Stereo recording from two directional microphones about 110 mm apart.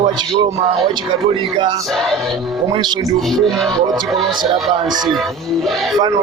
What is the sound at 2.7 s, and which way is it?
Speech, 45° right (ahead or behind).